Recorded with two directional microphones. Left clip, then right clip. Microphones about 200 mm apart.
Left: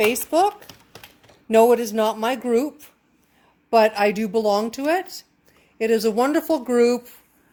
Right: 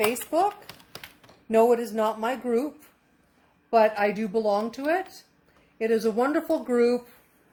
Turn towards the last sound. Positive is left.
turn(degrees=50)  # may be behind; listen again after turning